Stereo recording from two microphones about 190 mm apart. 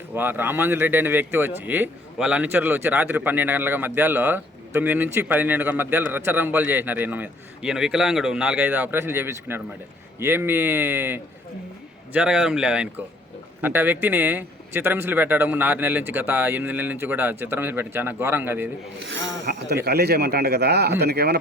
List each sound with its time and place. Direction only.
0.1 s a man's voice: 10° right (ahead or behind)
19.0 s speech: 70° right (ahead or behind)